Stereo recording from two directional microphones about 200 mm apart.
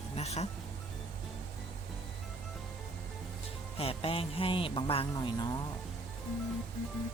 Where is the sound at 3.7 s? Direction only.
30° left (ahead or behind).